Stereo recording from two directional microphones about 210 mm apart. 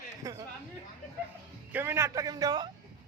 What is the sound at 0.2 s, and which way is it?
Speech, 15° right (ahead or behind).